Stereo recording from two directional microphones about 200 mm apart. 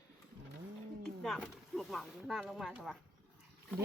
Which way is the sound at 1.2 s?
Centre (ahead or behind).